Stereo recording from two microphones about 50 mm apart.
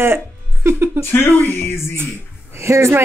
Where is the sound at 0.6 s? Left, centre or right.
Right.